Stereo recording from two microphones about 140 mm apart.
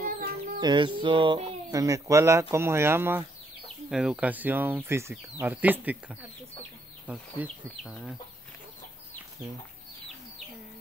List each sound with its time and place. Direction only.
0.0 s music: 90° right
0.6 s chicken: 30° right (ahead or behind)
1.7 s speech: 25° right (ahead or behind)
3.6 s speech: 5° right (ahead or behind)